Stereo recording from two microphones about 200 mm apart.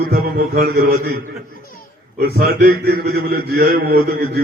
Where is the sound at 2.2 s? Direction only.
50° right (ahead or behind).